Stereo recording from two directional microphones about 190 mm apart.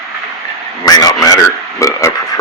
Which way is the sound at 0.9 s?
20° left (ahead or behind).